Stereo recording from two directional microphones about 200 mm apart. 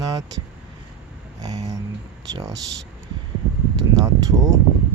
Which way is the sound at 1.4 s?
20° right (ahead or behind).